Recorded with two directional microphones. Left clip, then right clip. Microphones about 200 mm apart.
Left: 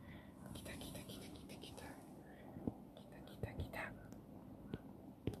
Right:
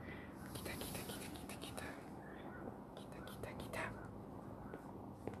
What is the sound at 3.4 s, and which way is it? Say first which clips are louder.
Whispering: right 2 dB; 5° right (ahead or behind).